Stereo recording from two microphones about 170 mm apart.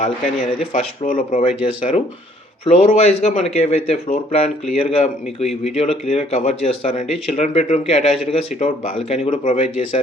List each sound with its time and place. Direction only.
0.7 s speech: 45° left (ahead or behind)